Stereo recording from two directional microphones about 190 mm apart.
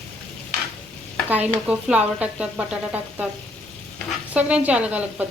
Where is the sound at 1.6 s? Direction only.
5° right (ahead or behind).